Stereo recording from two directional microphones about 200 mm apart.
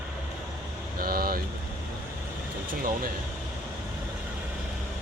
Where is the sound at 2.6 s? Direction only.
45° right (ahead or behind).